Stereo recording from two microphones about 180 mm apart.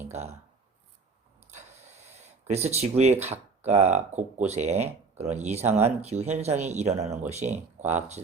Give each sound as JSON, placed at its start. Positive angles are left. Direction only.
{"t": 0.1, "sound": "speech", "side_deg": -40}
{"t": 1.5, "sound": "a sound", "side_deg": -40}
{"t": 3.6, "sound": "speech", "side_deg": -35}